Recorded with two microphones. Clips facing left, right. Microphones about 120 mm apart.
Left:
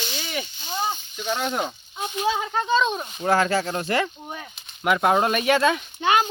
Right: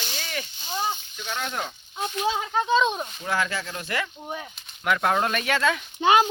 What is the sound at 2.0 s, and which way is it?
Speech, 5° left (ahead or behind).